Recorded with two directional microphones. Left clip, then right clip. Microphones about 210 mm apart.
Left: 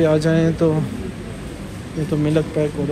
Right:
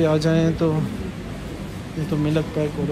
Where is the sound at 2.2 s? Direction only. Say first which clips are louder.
Left 4 dB; 20° right (ahead or behind).